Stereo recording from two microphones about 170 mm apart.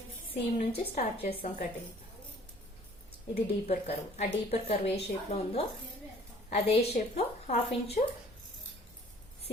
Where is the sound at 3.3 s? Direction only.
35° left (ahead or behind).